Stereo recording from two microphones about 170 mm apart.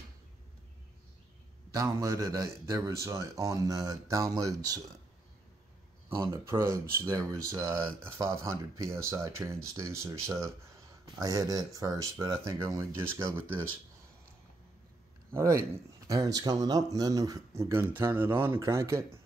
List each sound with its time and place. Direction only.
1.7 s speech: 20° right (ahead or behind)
6.2 s speech: 15° right (ahead or behind)
15.3 s speech: 15° right (ahead or behind)